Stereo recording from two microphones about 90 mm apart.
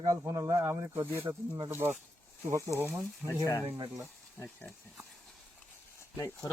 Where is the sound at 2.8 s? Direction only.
20° right (ahead or behind).